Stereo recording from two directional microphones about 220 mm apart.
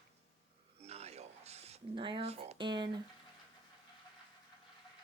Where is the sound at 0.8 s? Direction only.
30° right (ahead or behind).